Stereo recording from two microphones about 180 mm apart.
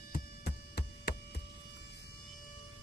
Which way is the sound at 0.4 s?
65° left (ahead or behind).